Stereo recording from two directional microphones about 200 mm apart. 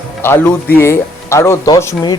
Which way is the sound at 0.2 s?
10° left (ahead or behind).